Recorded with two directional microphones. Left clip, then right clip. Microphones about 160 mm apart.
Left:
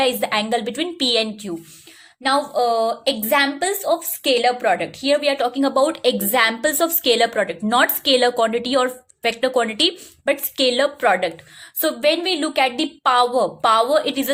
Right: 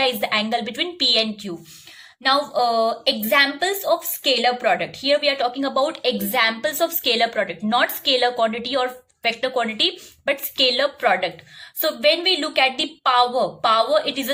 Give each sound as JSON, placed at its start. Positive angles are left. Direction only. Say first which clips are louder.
{"t": 0.0, "sound": "a woman's voice", "louder": "left 1 dB", "side_deg": 35}